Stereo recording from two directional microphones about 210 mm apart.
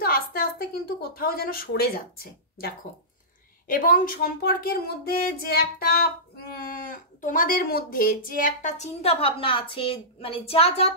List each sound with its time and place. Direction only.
0.0 s a woman's voice: 45° left (ahead or behind); by 10.9 s 30° left (ahead or behind)